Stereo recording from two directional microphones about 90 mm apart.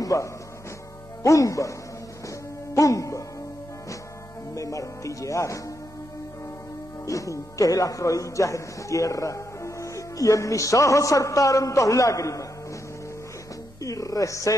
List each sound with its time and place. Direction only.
0.0 s speech: 40° left (ahead or behind)
2.2 s music: 40° left (ahead or behind)
4.6 s speech: 40° left (ahead or behind)
7.1 s speech: 35° left (ahead or behind)
13.7 s speech: 40° left (ahead or behind)